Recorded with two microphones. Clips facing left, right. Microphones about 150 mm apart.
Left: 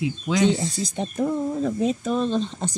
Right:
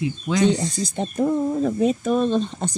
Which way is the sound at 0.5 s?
60° right (ahead or behind).